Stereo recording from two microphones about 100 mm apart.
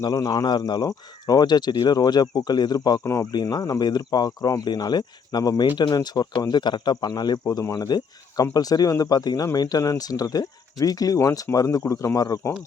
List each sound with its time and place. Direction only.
0.0 s speech: 40° left (ahead or behind)
3.0 s speech: 30° left (ahead or behind)
3.3 s speech: 45° left (ahead or behind)